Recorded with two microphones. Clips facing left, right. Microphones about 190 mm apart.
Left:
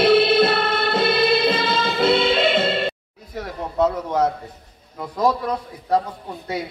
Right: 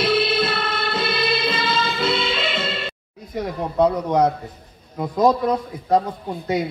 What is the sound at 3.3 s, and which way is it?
A man's voice, 15° right (ahead or behind).